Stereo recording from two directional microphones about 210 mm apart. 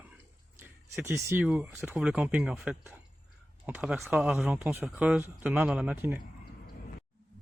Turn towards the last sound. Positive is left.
turn(degrees=-10)  # may be behind; listen again after turning